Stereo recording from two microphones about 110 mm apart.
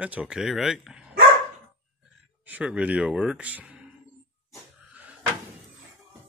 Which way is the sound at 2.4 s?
10° right (ahead or behind).